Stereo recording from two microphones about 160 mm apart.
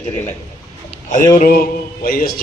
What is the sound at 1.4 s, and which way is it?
Music, 70° left (ahead or behind).